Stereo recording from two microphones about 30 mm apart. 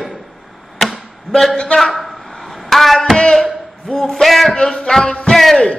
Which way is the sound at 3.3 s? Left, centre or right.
Centre.